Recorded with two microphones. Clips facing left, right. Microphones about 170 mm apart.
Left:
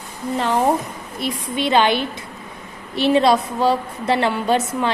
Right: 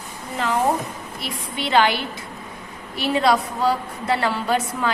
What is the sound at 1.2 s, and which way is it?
A woman's voice, 20° left (ahead or behind).